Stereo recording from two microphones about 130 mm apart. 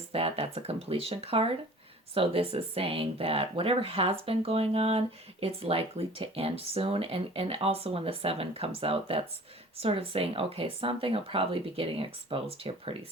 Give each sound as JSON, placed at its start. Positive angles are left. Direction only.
{"t": 0.1, "sound": "speech", "side_deg": -50}